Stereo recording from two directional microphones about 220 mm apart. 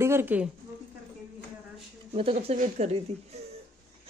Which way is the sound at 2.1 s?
25° right (ahead or behind).